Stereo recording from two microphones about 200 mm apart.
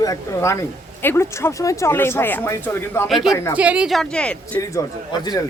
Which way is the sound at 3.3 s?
15° left (ahead or behind).